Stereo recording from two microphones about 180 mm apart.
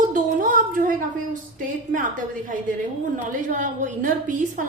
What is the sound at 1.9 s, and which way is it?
A woman's voice, 50° right (ahead or behind).